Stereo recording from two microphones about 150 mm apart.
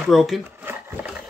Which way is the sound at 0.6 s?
15° right (ahead or behind).